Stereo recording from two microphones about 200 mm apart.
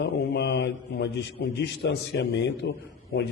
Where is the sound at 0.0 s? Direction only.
60° left (ahead or behind).